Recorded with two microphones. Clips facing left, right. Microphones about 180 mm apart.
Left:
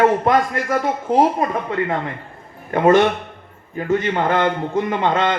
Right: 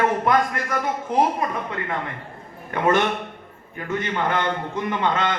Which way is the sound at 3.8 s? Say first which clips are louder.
Left 6 dB; 40° left (ahead or behind).